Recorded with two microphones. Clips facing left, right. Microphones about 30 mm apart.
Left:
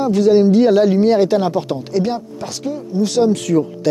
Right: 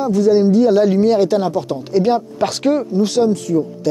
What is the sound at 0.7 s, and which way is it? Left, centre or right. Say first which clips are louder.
Speech: even; centre.